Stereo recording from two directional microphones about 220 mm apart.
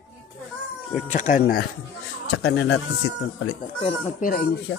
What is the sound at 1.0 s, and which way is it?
Speech, 35° left (ahead or behind).